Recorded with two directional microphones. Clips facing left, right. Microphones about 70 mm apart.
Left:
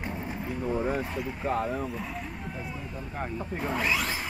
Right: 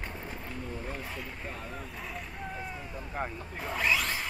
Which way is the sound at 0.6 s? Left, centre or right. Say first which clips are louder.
Left 13 dB; left.